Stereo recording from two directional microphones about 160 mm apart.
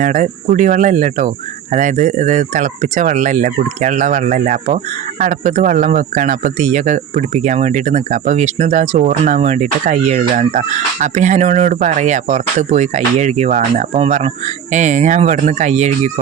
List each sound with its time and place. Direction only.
0.0 s a man's voice: 50° right (ahead or behind)